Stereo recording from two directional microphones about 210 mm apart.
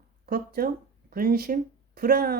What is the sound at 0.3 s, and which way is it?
Speech, 45° right (ahead or behind).